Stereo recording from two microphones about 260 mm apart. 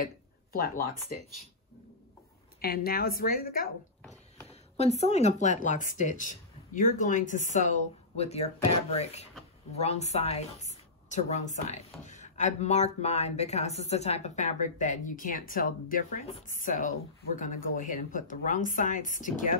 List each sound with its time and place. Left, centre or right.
0.0 s speech: left
2.6 s a woman's voice: left
4.7 s a woman's voice: left